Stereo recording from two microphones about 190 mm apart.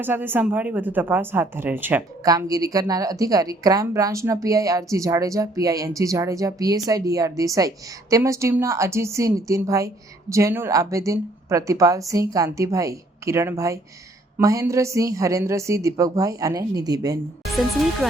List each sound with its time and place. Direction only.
0.0 s a woman's voice: 10° right (ahead or behind)
17.4 s speech: centre (ahead or behind)